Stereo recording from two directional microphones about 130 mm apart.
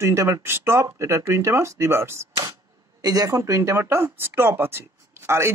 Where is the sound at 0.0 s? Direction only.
20° right (ahead or behind).